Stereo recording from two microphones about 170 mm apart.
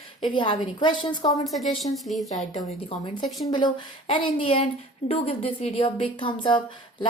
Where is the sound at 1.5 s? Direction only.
Centre (ahead or behind).